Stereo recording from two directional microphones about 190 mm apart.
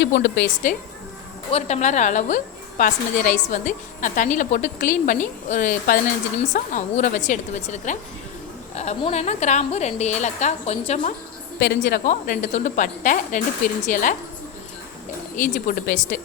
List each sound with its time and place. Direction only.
0.0 s a woman's voice: 70° left (ahead or behind)
1.5 s a woman's voice: 35° left (ahead or behind)
11.6 s a woman's voice: 60° left (ahead or behind)
12.0 s speech: 45° left (ahead or behind)
15.4 s speech: 40° left (ahead or behind)